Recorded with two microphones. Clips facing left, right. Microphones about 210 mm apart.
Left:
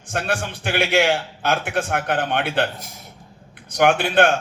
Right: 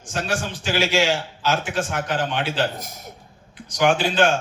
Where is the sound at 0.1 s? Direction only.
55° left (ahead or behind).